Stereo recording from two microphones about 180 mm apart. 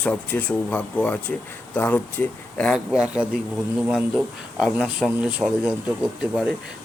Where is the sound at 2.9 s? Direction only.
5° right (ahead or behind).